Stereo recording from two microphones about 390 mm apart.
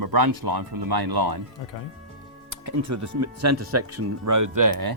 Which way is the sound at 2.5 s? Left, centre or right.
Right.